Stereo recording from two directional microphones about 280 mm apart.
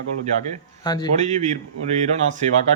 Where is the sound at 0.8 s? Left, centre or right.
Centre.